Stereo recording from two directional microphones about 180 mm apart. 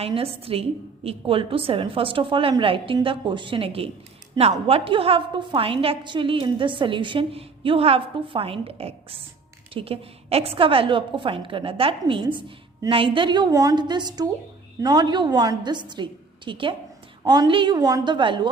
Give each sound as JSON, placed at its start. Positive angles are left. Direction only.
{"t": 0.0, "sound": "a woman's voice", "side_deg": -30}